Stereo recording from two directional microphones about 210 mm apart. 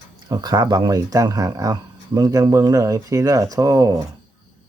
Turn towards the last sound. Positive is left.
turn(degrees=-15)  # may be behind; listen again after turning